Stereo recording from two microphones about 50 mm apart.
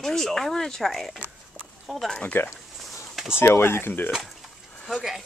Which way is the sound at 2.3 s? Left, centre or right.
Left.